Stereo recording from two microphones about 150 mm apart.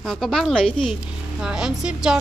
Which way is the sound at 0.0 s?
Centre (ahead or behind).